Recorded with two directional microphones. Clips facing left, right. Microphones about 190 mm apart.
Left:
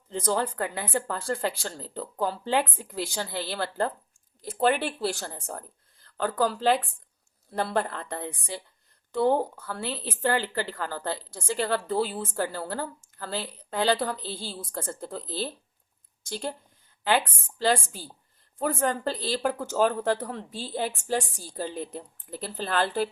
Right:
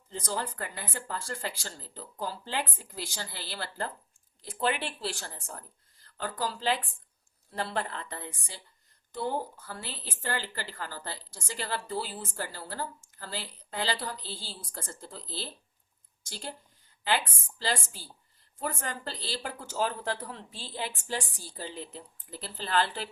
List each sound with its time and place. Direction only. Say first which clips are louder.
0.1 s a woman's voice: left 7 dB; 60° left (ahead or behind)
4.4 s a woman's voice: left 6 dB; 45° left (ahead or behind)
6.2 s a woman's voice: left 7 dB; 60° left (ahead or behind)
17.6 s a woman's voice: left 8 dB; 50° left (ahead or behind)